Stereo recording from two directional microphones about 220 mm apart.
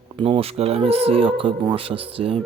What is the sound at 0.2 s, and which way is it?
Speech, 25° right (ahead or behind).